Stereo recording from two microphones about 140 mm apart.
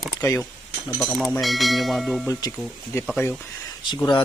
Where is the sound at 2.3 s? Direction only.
25° left (ahead or behind).